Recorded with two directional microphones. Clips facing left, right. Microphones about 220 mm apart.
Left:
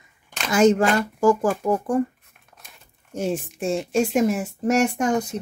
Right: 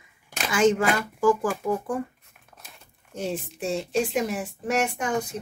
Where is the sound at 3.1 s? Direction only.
45° left (ahead or behind).